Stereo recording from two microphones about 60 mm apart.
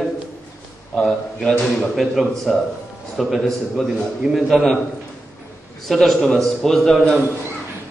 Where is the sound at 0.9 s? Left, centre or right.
Centre.